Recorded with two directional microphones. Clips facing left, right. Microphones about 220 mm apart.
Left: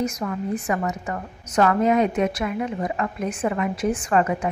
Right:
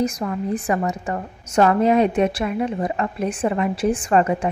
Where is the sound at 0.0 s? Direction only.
35° right (ahead or behind).